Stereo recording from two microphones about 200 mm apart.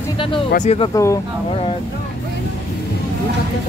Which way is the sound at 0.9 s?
15° left (ahead or behind).